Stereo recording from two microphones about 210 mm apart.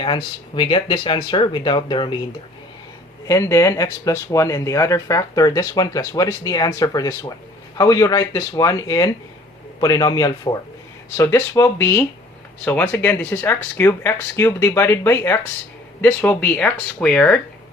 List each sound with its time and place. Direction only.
0.0 s speech: 25° left (ahead or behind)
3.2 s speech: 15° left (ahead or behind)